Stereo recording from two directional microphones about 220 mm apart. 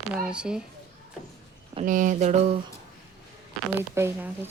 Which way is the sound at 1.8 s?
35° right (ahead or behind).